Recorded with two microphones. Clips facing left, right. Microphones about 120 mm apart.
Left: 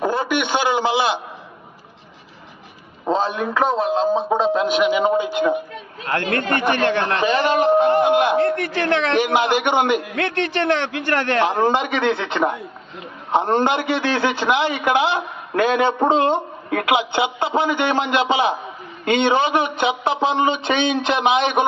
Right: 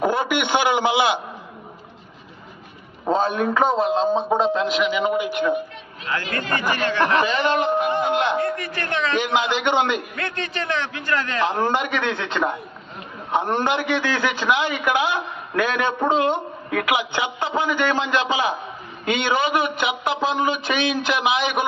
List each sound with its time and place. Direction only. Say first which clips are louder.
0.0 s a man's voice: even; 20° right (ahead or behind)
3.1 s a man's voice: even; centre (ahead or behind)
4.8 s a man's voice: left 4 dB; 25° left (ahead or behind)
6.1 s speech: left 4 dB; 55° left (ahead or behind)
7.3 s a man's voice: left 4 dB; 35° left (ahead or behind)
8.0 s a man's voice: left 5 dB; 15° left (ahead or behind)
8.4 s a man's voice: left 6 dB; 75° left (ahead or behind)
9.6 s a man's voice: left 2 dB; 15° left (ahead or behind)
10.0 s a man's voice: left 7 dB; 80° left
11.6 s a man's voice: left 4 dB; 20° left (ahead or behind)
13.3 s a man's voice: left 3 dB; 20° left (ahead or behind)
15.9 s a man's voice: left 3 dB; 30° left (ahead or behind)